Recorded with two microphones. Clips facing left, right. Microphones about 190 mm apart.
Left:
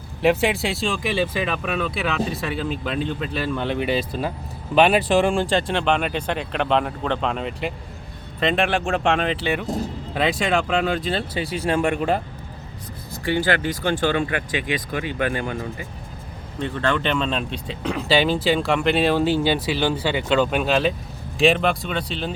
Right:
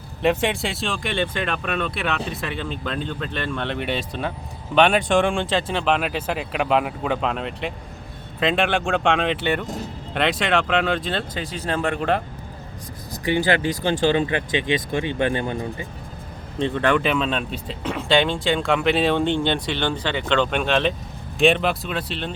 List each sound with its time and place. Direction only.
0.2 s speech: centre (ahead or behind)
13.2 s speech: 20° right (ahead or behind)
17.1 s speech: centre (ahead or behind)